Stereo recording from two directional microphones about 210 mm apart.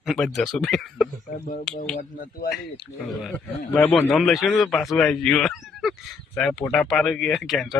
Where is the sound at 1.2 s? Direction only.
35° left (ahead or behind).